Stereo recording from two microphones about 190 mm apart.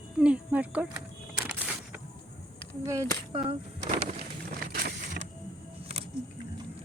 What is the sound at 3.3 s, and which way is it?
Speech, 30° right (ahead or behind).